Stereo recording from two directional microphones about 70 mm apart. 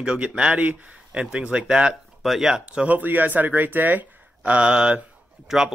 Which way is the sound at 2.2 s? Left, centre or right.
Centre.